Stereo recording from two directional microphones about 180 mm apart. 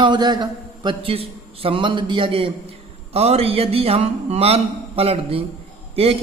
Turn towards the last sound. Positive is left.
turn(degrees=-30)  # may be behind; listen again after turning